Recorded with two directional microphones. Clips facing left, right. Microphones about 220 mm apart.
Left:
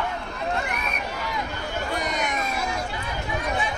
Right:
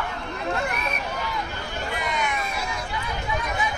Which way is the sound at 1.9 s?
45° left (ahead or behind).